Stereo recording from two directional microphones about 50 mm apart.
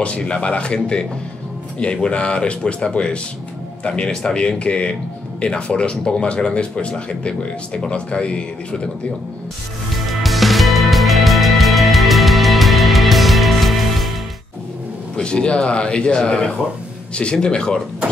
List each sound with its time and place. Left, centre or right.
0.0 s speech: left
1.8 s speech: left
10.0 s music: centre
15.1 s speech: centre